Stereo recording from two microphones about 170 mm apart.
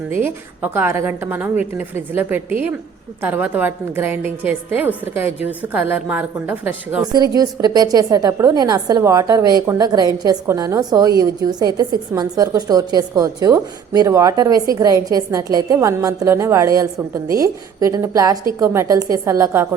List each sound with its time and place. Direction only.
0.1 s a woman's voice: 15° right (ahead or behind)
3.2 s a woman's voice: 10° right (ahead or behind)
7.1 s a woman's voice: 25° right (ahead or behind)